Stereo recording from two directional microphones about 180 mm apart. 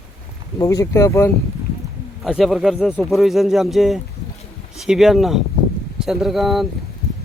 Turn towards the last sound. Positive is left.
turn(degrees=0)  # may be behind; listen again after turning